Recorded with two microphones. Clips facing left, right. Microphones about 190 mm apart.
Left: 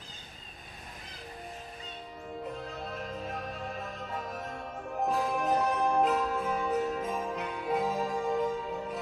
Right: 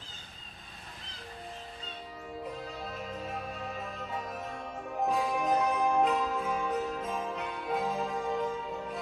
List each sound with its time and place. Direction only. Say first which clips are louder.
2.5 s music: left 1 dB; centre (ahead or behind)